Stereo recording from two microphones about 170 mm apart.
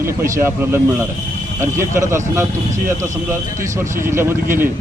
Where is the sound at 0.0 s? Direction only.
15° right (ahead or behind).